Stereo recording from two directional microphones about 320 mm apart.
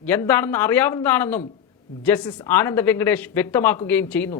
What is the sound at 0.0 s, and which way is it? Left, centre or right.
Speech, centre.